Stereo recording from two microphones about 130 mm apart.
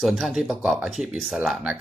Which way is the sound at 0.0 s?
Centre (ahead or behind).